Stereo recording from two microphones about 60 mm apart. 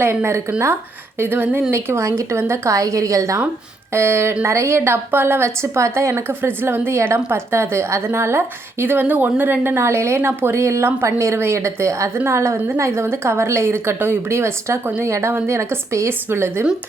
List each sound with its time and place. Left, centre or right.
0.0 s a woman's voice: right
1.2 s speech: right
1.7 s a woman's voice: right
3.9 s a woman's voice: right
9.8 s a woman's voice: right
12.1 s a woman's voice: right
15.0 s a woman's voice: right
15.3 s speech: right
15.5 s a woman's voice: right